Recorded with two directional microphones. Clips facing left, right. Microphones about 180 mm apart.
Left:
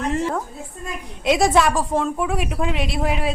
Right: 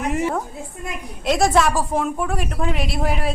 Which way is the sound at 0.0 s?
10° right (ahead or behind).